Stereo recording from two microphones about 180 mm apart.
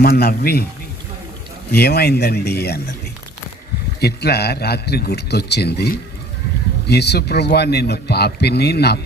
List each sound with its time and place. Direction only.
0.0 s a man's voice: 55° left (ahead or behind)
1.7 s a man's voice: 65° left (ahead or behind)
4.0 s a man's voice: 65° left (ahead or behind)